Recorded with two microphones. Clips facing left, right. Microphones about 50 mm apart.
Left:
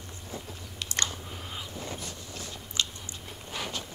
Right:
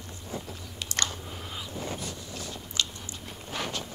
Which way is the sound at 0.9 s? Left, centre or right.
Left.